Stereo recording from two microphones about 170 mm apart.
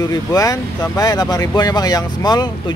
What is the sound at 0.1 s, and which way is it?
Speech, 20° left (ahead or behind).